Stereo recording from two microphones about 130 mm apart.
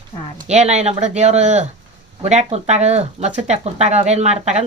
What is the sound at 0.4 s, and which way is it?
Speech, 60° right (ahead or behind).